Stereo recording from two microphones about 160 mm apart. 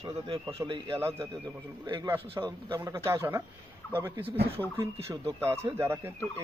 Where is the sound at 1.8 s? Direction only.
25° right (ahead or behind).